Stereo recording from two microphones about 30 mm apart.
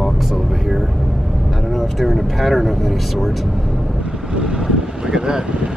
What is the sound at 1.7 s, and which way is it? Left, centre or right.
Speech, centre.